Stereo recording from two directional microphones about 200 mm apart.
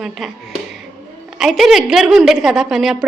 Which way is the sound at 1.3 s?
Centre (ahead or behind).